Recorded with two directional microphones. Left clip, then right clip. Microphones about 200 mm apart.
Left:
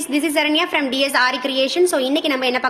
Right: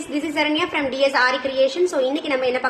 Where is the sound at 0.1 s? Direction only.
45° left (ahead or behind).